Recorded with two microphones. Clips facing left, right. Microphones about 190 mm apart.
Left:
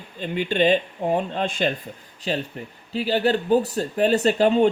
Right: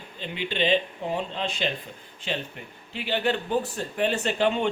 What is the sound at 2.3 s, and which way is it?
Speech, 35° left (ahead or behind).